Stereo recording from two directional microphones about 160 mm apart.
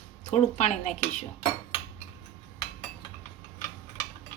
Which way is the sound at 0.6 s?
45° left (ahead or behind).